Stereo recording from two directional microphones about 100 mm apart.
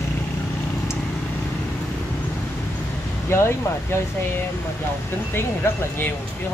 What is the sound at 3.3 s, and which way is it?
Speech, 25° left (ahead or behind).